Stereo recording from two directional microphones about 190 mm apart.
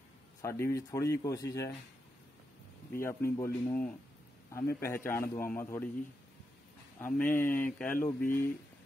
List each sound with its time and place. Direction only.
0.4 s a man's voice: 15° left (ahead or behind)
2.9 s a man's voice: 15° left (ahead or behind)
7.0 s a man's voice: 10° left (ahead or behind)